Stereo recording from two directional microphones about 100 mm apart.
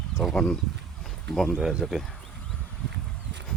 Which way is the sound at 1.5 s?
10° right (ahead or behind).